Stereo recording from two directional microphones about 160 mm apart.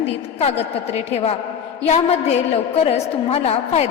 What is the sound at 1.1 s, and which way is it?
A woman's voice, 40° left (ahead or behind).